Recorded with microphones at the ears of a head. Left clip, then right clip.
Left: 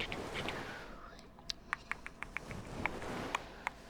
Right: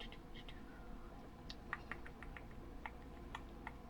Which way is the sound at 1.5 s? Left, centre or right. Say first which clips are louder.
Left 8 dB; left.